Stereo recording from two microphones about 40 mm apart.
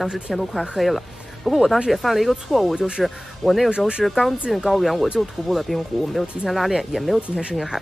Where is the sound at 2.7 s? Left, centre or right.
Centre.